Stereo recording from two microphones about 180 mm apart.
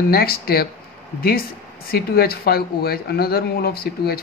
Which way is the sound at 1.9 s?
60° left (ahead or behind).